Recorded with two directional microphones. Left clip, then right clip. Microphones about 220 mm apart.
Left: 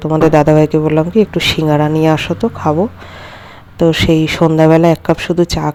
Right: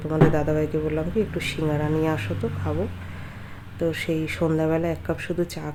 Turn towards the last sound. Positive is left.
turn(degrees=35)  # may be behind; listen again after turning